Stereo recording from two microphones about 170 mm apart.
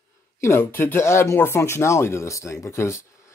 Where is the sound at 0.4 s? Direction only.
15° left (ahead or behind).